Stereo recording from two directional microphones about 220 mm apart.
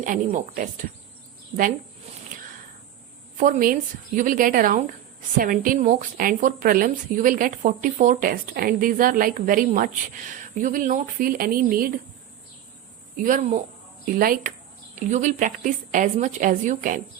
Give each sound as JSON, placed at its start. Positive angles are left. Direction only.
{"t": 0.0, "sound": "a woman's voice", "side_deg": -35}
{"t": 3.3, "sound": "a woman's voice", "side_deg": -35}
{"t": 13.1, "sound": "a woman's voice", "side_deg": -35}